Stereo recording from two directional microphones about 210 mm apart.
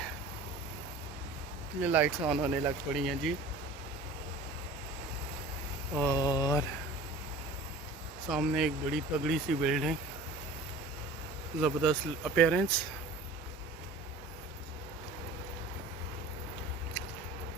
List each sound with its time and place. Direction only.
1.8 s speech: 10° right (ahead or behind)
6.0 s speech: 15° left (ahead or behind)
8.3 s speech: centre (ahead or behind)
11.6 s speech: centre (ahead or behind)